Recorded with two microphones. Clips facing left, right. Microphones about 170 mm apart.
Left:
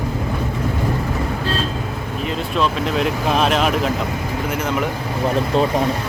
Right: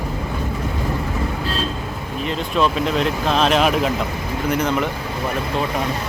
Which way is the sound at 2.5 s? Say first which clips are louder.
Right 1 dB; 5° right (ahead or behind).